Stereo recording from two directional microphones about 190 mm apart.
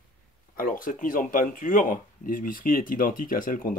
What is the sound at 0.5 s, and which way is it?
Speech, 45° left (ahead or behind).